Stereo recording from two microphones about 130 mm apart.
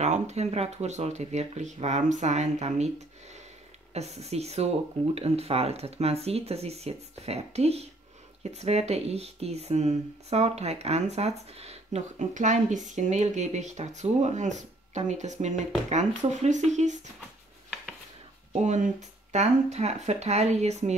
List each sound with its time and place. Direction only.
0.0 s speech: 60° right (ahead or behind)
3.9 s speech: 55° right (ahead or behind)
18.5 s speech: 65° right (ahead or behind)